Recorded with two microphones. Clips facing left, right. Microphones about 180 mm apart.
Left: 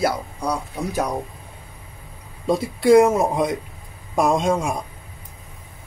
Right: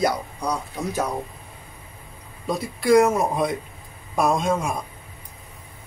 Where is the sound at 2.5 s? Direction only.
25° left (ahead or behind).